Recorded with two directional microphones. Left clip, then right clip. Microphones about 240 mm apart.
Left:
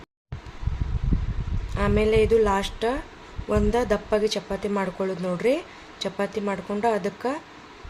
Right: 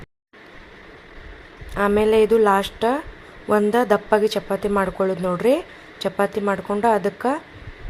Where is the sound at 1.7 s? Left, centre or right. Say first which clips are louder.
Right 5 dB; centre.